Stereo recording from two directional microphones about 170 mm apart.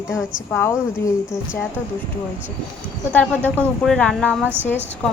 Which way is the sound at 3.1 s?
10° left (ahead or behind).